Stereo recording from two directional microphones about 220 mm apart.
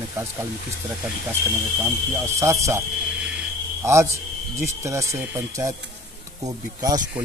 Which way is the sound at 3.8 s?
15° right (ahead or behind).